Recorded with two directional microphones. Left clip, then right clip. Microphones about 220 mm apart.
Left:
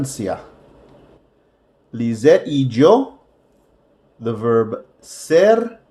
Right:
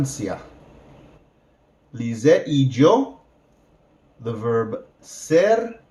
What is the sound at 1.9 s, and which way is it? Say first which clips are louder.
Speech: left 4 dB; 40° left (ahead or behind).